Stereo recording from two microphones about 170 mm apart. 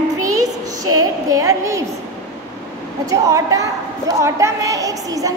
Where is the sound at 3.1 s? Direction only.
20° right (ahead or behind).